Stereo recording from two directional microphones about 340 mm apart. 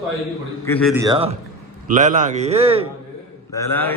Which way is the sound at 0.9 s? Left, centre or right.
Centre.